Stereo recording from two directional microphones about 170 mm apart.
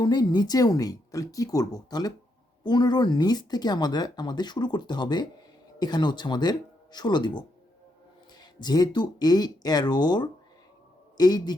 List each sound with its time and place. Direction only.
0.0 s speech: 25° left (ahead or behind)